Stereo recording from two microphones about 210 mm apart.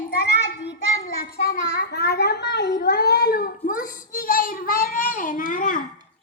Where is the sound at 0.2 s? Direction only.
55° left (ahead or behind).